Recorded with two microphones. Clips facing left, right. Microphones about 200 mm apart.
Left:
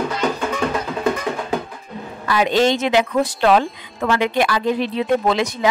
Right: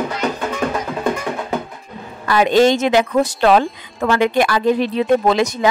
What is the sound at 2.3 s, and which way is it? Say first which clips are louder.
Speech: right 4 dB; 45° right (ahead or behind).